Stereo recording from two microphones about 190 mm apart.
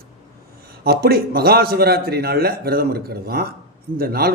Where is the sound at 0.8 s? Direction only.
55° right (ahead or behind).